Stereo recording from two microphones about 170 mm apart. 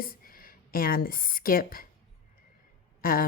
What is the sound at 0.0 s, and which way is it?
A woman's voice, 60° left (ahead or behind).